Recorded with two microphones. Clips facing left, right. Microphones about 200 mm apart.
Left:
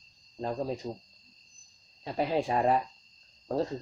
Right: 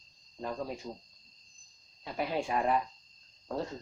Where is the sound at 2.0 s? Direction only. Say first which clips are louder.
Left 4 dB; 35° left (ahead or behind).